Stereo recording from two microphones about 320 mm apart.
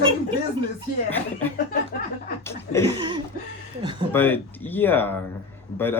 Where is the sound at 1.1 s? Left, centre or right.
Centre.